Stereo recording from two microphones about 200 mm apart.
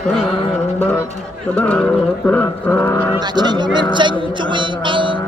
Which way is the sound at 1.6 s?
5° left (ahead or behind).